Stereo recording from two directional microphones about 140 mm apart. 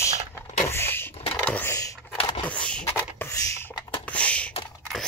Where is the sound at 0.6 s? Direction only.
15° left (ahead or behind).